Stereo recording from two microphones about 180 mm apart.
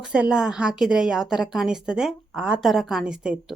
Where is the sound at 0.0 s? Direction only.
5° right (ahead or behind).